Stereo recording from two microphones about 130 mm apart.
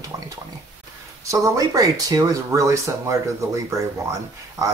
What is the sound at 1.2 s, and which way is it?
Speech, 25° right (ahead or behind).